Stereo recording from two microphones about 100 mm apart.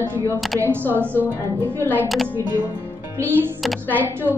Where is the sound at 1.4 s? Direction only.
20° left (ahead or behind).